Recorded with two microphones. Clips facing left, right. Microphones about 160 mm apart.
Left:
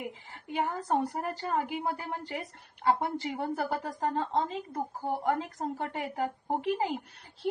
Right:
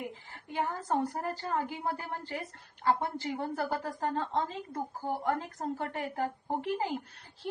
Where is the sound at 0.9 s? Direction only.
20° left (ahead or behind).